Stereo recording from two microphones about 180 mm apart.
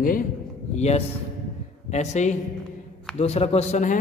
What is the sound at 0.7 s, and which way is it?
A man's voice, 35° left (ahead or behind).